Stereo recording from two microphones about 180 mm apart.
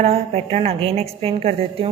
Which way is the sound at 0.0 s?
35° right (ahead or behind).